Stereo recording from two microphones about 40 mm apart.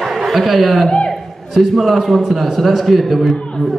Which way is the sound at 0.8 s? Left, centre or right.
Left.